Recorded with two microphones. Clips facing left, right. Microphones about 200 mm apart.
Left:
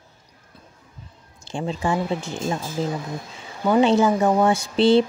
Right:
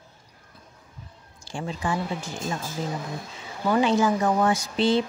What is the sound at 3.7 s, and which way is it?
A woman's voice, 25° left (ahead or behind).